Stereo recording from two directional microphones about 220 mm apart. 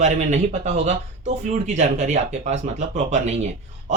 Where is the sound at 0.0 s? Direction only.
30° right (ahead or behind).